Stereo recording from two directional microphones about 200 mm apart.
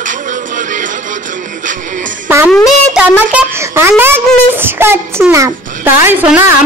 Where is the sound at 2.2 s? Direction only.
10° right (ahead or behind).